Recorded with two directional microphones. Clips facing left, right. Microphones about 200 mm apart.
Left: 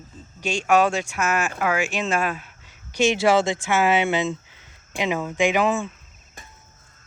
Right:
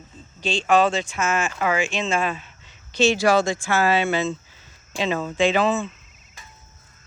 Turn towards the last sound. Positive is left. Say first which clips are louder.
# right 1 dB
turn(degrees=15)  # may be behind; listen again after turning